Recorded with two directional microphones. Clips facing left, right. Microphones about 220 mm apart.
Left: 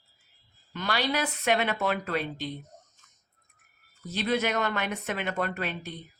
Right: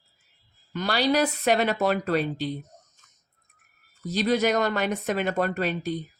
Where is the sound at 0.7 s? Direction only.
35° right (ahead or behind).